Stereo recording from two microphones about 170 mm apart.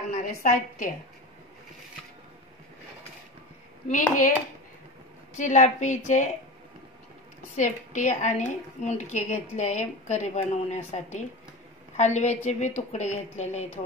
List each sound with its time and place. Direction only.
0.1 s a woman's voice: 50° left (ahead or behind)
3.9 s a woman's voice: 50° left (ahead or behind)
5.4 s a woman's voice: 45° left (ahead or behind)
7.5 s a woman's voice: 45° left (ahead or behind)